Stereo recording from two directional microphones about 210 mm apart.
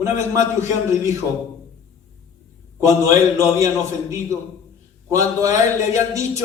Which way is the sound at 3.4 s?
15° right (ahead or behind).